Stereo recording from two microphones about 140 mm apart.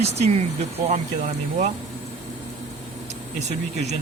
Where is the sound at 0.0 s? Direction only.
50° right (ahead or behind).